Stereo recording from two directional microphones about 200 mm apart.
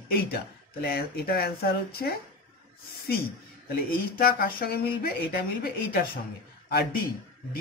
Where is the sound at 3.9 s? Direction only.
45° left (ahead or behind).